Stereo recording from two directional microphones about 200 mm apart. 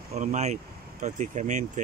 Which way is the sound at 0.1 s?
35° right (ahead or behind).